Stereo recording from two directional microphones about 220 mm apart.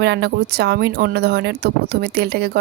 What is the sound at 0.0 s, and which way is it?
Speech, 50° right (ahead or behind).